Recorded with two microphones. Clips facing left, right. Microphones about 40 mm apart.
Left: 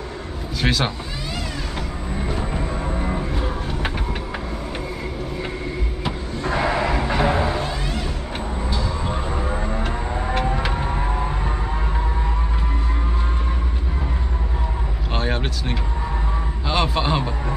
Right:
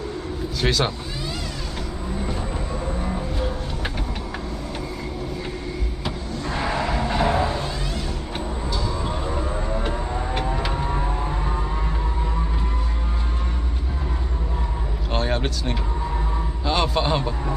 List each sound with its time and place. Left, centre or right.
0.6 s a man's voice: centre
2.5 s music: left
6.0 s vehicle: centre
10.5 s vehicle: centre
15.1 s a sound: centre
16.6 s a man's voice: centre